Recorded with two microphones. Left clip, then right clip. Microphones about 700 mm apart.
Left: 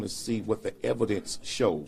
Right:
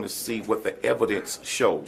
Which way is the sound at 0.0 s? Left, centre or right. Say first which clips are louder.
Right 2 dB; left.